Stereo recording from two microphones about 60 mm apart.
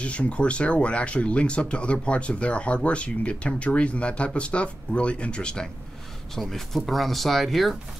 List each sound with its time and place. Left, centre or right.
0.0 s speech: left; by 7.7 s centre